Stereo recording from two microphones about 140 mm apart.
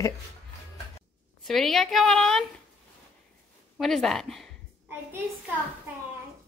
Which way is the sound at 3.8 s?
Centre (ahead or behind).